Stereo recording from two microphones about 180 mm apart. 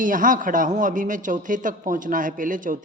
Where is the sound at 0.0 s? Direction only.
50° right (ahead or behind).